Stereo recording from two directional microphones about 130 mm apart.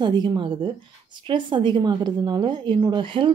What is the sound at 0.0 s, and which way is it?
A woman's voice, 35° right (ahead or behind).